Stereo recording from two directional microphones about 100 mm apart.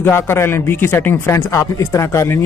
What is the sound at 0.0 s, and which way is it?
A man's voice, 25° left (ahead or behind).